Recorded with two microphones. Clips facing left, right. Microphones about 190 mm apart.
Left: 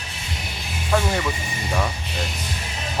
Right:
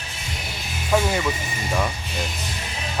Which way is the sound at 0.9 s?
10° right (ahead or behind).